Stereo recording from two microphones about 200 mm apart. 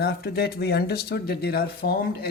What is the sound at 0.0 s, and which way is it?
Speech, 55° left (ahead or behind).